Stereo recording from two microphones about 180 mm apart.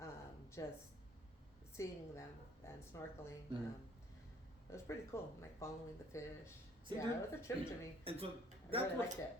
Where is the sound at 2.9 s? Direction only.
15° left (ahead or behind).